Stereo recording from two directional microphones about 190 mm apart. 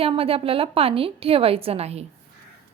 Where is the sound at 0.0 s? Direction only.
30° right (ahead or behind).